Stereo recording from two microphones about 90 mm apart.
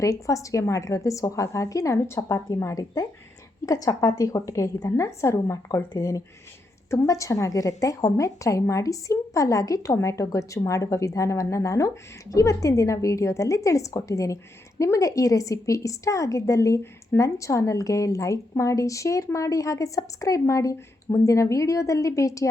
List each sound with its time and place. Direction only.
0.0 s a woman's voice: 35° left (ahead or behind)